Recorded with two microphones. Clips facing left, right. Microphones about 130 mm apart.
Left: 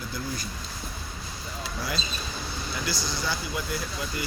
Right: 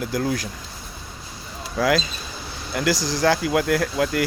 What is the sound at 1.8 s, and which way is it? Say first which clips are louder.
Speech: right 15 dB; 90° right.